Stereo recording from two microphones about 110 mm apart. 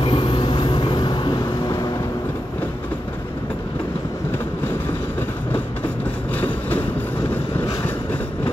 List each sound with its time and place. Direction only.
0.0 s vehicle: 50° left (ahead or behind)